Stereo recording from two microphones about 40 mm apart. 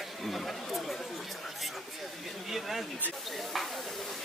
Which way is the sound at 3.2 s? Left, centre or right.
Centre.